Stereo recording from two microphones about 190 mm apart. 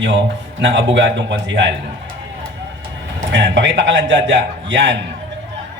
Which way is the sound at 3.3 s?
70° right (ahead or behind).